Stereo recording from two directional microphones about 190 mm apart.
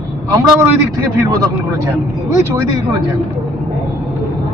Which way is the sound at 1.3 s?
20° right (ahead or behind).